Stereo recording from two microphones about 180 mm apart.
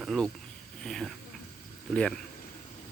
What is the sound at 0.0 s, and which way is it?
Speech, centre (ahead or behind).